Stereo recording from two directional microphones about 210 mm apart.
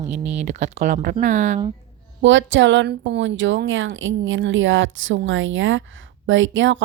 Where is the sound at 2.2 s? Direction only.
60° right (ahead or behind).